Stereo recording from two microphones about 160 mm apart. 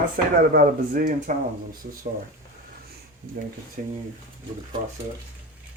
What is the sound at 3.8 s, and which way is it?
Speech, 50° right (ahead or behind).